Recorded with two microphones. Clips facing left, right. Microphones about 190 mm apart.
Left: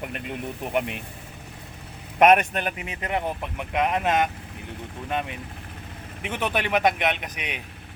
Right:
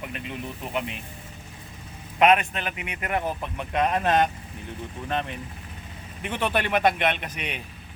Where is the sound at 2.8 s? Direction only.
25° left (ahead or behind).